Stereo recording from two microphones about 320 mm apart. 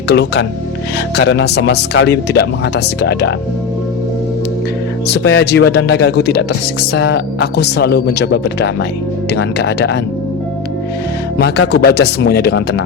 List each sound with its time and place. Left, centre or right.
0.1 s speech: left
5.0 s speech: left
11.3 s speech: left